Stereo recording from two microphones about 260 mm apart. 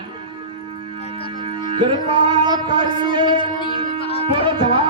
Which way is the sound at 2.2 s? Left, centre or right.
Centre.